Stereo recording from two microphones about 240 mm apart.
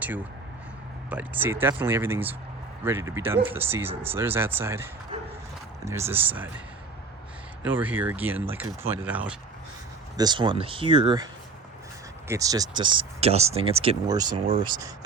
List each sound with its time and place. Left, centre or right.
1.1 s speech: centre
7.6 s speech: centre
10.2 s speech: centre
12.3 s speech: centre